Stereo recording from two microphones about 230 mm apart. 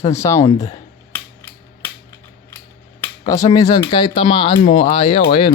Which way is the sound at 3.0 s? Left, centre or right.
Centre.